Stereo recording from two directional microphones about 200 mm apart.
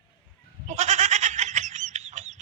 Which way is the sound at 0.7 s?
35° right (ahead or behind).